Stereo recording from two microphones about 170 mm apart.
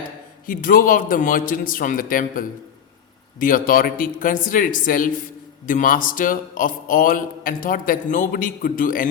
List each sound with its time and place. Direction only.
0.4 s a man's voice: 55° left (ahead or behind)